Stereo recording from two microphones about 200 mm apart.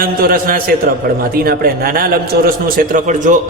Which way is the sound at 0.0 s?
45° right (ahead or behind).